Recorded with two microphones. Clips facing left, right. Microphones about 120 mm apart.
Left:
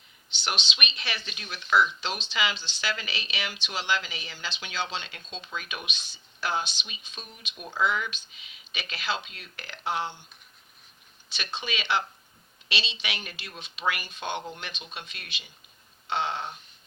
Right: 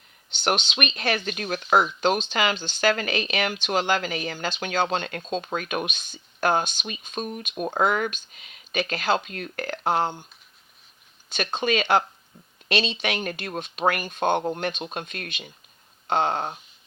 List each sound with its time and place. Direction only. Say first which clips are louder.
0.3 s speech: right 8 dB; 50° right (ahead or behind)
11.3 s speech: right 10 dB; 50° right (ahead or behind)